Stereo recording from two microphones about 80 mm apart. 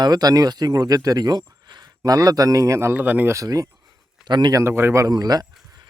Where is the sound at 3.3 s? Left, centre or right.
Right.